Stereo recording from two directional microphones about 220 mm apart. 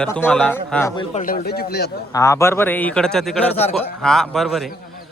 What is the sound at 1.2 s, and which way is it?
Speech, 40° left (ahead or behind).